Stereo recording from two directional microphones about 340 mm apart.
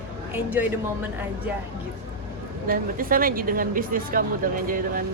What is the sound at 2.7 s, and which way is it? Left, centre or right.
Speech, right.